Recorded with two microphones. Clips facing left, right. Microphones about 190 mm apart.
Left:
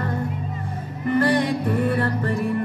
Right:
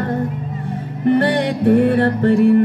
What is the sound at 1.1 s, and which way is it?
Music, 65° right (ahead or behind).